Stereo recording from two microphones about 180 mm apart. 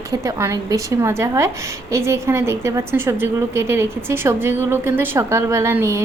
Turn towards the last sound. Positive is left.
turn(degrees=-15)  # may be behind; listen again after turning